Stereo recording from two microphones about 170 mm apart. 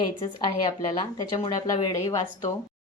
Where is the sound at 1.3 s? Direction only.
20° left (ahead or behind).